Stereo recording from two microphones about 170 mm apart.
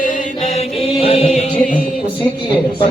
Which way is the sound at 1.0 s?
35° left (ahead or behind).